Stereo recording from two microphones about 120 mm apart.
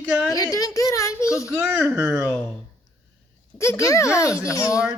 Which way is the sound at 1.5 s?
10° right (ahead or behind).